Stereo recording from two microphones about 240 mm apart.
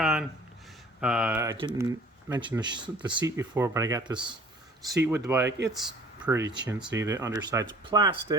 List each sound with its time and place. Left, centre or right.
0.0 s a sound: centre
1.0 s speech: centre
6.5 s speech: centre